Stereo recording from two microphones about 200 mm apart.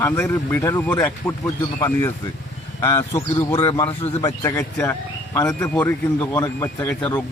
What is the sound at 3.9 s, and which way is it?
Speech, 30° left (ahead or behind).